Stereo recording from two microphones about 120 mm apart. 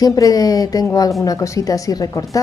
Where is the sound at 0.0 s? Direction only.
30° left (ahead or behind).